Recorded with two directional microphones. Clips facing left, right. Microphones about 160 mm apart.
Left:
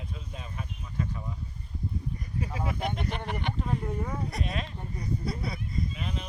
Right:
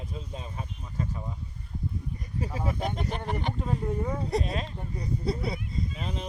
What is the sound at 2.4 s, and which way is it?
Speech, 40° right (ahead or behind).